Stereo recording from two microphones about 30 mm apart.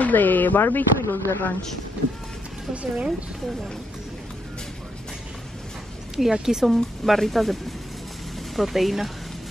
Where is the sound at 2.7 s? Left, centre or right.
Right.